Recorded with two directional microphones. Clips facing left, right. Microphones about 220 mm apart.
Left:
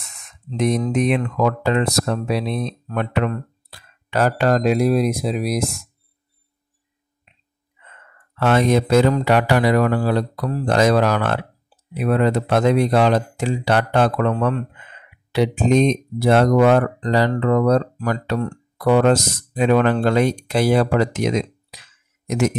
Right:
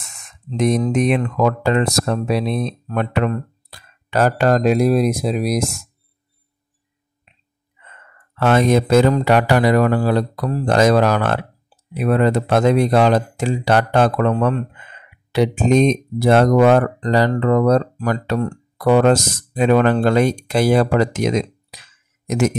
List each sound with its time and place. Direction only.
0.6 s speech: 45° right (ahead or behind)
8.4 s speech: 45° right (ahead or behind)